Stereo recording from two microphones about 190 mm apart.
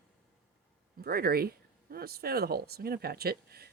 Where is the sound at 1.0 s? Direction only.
55° right (ahead or behind).